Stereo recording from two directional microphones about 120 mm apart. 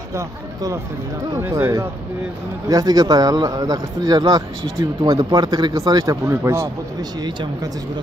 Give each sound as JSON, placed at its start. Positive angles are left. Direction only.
{"t": 0.1, "sound": "speech", "side_deg": -30}
{"t": 2.7, "sound": "speech", "side_deg": -35}